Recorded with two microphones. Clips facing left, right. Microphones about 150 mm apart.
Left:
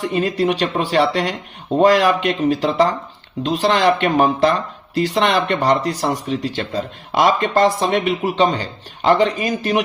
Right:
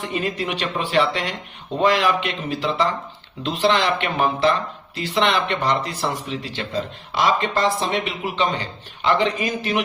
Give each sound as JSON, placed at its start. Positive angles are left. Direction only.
{"t": 0.0, "sound": "speech", "side_deg": 35}